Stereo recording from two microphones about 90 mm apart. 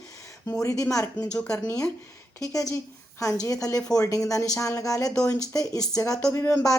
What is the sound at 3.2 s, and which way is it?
A woman's voice, 40° left (ahead or behind).